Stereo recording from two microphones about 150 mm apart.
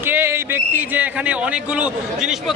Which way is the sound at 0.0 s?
15° right (ahead or behind).